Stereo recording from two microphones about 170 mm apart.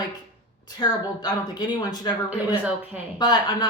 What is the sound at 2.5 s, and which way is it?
Speech, 10° right (ahead or behind).